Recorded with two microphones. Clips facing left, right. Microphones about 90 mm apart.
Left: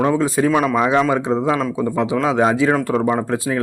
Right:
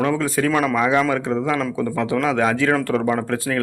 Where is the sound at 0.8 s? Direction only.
25° left (ahead or behind).